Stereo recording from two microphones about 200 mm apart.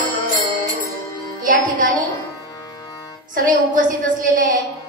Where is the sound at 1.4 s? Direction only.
45° right (ahead or behind).